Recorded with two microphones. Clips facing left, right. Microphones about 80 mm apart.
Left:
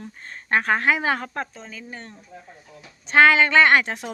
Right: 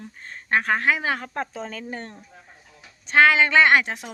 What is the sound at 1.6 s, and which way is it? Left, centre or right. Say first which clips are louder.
Speech: right 5 dB; right.